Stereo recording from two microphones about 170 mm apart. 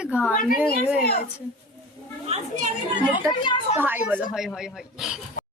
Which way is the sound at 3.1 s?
30° left (ahead or behind).